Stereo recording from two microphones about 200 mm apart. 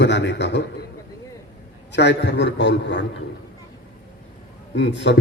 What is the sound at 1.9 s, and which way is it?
A man's voice, 60° left (ahead or behind).